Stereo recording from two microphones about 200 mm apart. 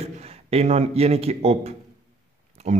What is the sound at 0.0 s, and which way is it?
A man's voice, 30° right (ahead or behind).